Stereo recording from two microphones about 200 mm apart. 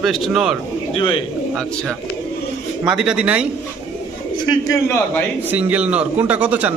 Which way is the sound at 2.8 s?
5° right (ahead or behind).